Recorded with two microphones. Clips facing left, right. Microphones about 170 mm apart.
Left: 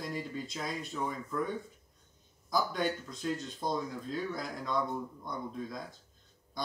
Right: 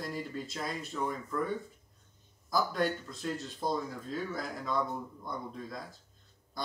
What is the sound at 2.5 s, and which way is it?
Speech, centre (ahead or behind).